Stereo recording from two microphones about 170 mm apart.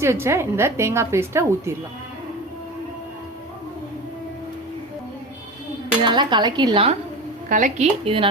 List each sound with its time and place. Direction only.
0.0 s a woman's voice: 15° right (ahead or behind)
6.1 s a woman's voice: 25° right (ahead or behind)
7.5 s speech: 50° right (ahead or behind)
8.0 s speech: 30° right (ahead or behind)